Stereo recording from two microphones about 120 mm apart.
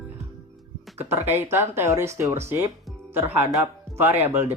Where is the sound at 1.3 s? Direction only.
20° right (ahead or behind).